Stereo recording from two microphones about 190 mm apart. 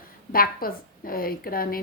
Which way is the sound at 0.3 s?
50° left (ahead or behind).